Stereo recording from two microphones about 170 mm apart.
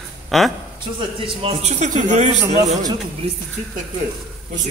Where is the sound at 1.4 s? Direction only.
40° right (ahead or behind).